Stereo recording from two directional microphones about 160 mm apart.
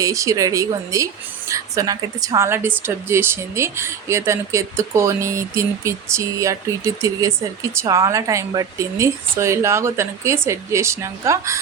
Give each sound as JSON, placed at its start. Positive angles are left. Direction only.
{"t": 0.0, "sound": "a woman's voice", "side_deg": -20}